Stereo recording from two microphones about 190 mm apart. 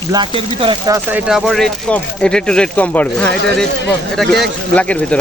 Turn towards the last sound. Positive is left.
turn(degrees=5)  # may be behind; listen again after turning